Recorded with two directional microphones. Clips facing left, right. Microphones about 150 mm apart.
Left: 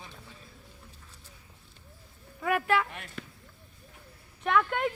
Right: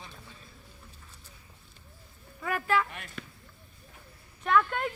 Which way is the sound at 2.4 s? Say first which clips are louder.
Left 2 dB; 70° left (ahead or behind).